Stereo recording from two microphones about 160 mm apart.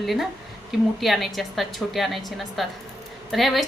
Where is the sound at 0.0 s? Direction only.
Centre (ahead or behind).